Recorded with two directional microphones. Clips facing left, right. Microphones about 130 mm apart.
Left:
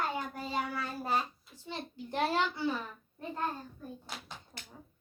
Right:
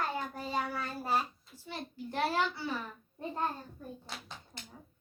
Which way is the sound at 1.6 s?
20° left (ahead or behind).